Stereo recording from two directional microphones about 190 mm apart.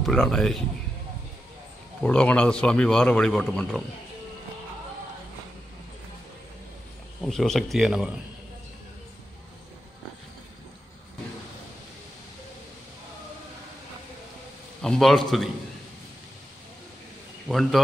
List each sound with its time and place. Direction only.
0.0 s a man's voice: centre (ahead or behind)
2.0 s a man's voice: 5° left (ahead or behind)
7.2 s a man's voice: centre (ahead or behind)
14.8 s a man's voice: centre (ahead or behind)
17.5 s a man's voice: centre (ahead or behind)